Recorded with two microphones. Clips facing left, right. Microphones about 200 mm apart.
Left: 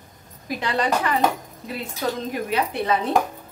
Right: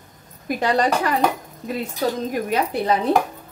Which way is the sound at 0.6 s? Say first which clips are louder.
Right 3 dB; 45° right (ahead or behind).